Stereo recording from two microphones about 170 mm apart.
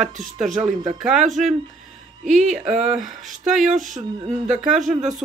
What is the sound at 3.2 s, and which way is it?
Speech, 45° right (ahead or behind).